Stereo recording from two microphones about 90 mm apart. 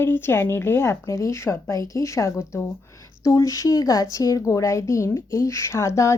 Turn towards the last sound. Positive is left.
turn(degrees=30)  # may be behind; listen again after turning